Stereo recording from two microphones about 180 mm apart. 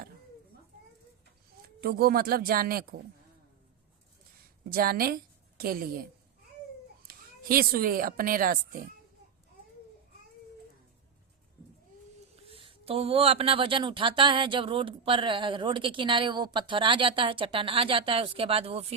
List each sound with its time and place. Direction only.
1.6 s speech: 55° right (ahead or behind)
4.7 s a woman's voice: 55° right (ahead or behind)
7.1 s a woman's voice: 55° right (ahead or behind)
12.5 s speech: 30° right (ahead or behind)